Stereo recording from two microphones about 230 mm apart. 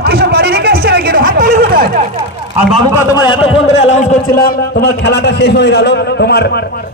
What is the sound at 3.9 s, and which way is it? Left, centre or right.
A man's voice, left.